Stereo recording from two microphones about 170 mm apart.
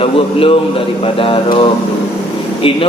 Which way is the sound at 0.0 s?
35° left (ahead or behind).